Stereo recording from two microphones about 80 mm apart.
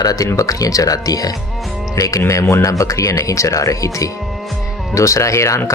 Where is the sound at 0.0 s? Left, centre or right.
Left.